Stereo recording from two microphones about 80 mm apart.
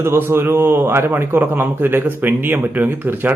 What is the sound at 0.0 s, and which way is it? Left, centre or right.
A man's voice, right.